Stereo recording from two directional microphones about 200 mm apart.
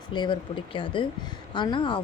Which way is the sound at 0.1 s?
25° left (ahead or behind).